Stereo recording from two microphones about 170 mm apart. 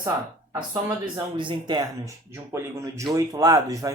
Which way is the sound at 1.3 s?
25° right (ahead or behind).